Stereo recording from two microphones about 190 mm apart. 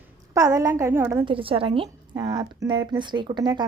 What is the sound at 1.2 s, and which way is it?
A woman's voice, 30° right (ahead or behind).